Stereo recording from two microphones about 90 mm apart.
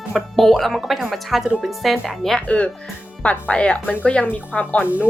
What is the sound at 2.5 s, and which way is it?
A woman's voice, 15° left (ahead or behind).